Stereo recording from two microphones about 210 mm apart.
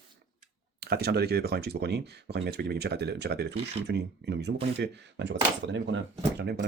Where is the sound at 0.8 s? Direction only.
50° right (ahead or behind).